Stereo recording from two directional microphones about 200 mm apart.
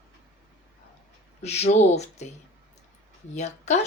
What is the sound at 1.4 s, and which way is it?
Speech, 35° left (ahead or behind).